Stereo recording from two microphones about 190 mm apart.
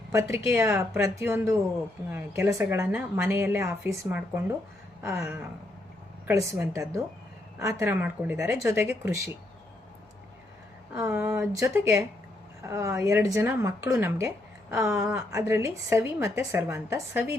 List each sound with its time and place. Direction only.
0.1 s a woman's voice: 15° right (ahead or behind)
10.9 s a woman's voice: 15° right (ahead or behind)